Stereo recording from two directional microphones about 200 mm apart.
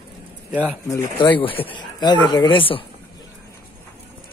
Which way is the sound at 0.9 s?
15° left (ahead or behind).